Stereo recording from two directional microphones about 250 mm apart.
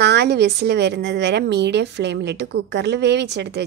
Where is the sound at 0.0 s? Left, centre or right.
Right.